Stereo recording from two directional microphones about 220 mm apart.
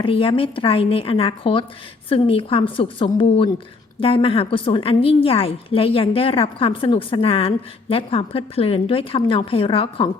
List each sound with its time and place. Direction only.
0.0 s a woman's voice: 25° left (ahead or behind)